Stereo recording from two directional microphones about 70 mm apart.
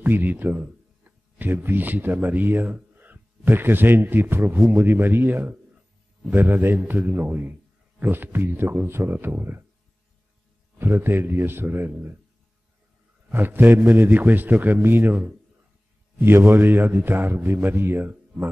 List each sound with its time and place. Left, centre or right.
0.0 s a man's voice: right
10.8 s a man's voice: right
13.3 s a man's voice: right